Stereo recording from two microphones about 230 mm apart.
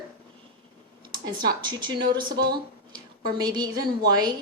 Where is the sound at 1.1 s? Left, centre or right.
Centre.